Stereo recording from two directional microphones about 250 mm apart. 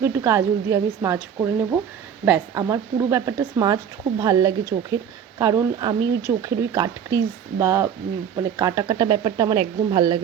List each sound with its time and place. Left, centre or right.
0.0 s speech: centre